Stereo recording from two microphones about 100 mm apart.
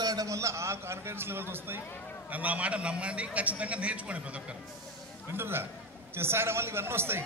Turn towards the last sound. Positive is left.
turn(degrees=-25)  # may be behind; listen again after turning